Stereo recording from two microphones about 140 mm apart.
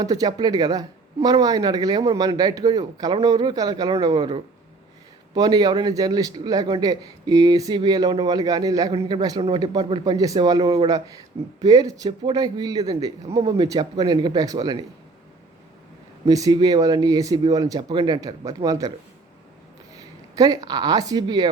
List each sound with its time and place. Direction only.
0.0 s a man's voice: 25° right (ahead or behind)
16.2 s a man's voice: 25° right (ahead or behind)
20.3 s a man's voice: 25° right (ahead or behind)